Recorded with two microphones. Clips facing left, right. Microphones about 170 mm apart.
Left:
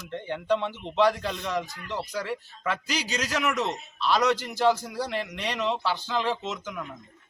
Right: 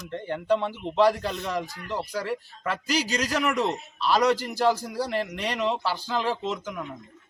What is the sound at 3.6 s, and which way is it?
Speech, 35° right (ahead or behind).